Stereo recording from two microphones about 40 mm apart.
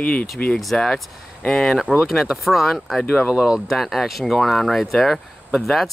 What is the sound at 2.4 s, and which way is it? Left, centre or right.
Speech, centre.